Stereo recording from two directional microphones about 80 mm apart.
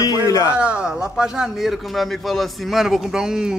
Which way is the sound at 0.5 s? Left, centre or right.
Centre.